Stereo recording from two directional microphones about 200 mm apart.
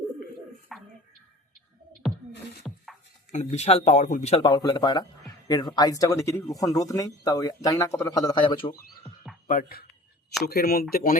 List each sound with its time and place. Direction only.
0.7 s a sound: centre (ahead or behind)
2.0 s music: centre (ahead or behind)
3.3 s speech: 35° left (ahead or behind)
9.5 s speech: 45° left (ahead or behind)